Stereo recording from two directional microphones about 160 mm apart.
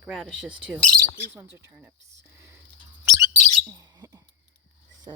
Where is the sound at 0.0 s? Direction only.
Centre (ahead or behind).